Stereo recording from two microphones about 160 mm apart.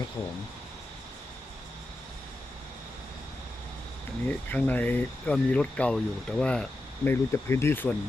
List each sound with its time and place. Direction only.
4.3 s speech: 10° left (ahead or behind)